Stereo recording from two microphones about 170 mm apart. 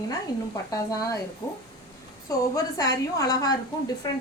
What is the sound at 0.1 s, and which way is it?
A woman's voice, 20° left (ahead or behind).